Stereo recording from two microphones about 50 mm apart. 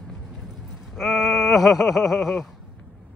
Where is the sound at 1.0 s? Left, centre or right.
Centre.